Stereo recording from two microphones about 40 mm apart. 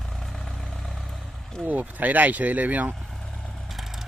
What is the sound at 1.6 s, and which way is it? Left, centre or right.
Speech, right.